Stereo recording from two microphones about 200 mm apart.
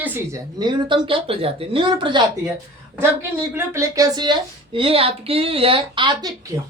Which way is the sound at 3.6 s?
15° right (ahead or behind).